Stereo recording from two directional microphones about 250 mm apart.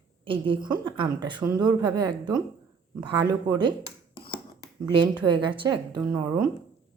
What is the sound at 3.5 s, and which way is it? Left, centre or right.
Speech, centre.